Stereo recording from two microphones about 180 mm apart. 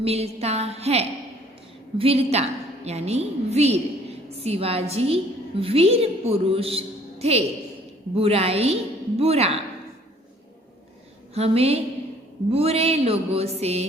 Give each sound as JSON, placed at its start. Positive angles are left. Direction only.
{"t": 0.0, "sound": "a woman's voice", "side_deg": -35}
{"t": 11.3, "sound": "a woman's voice", "side_deg": -35}